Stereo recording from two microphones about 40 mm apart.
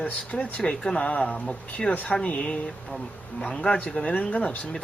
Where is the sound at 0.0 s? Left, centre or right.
Left.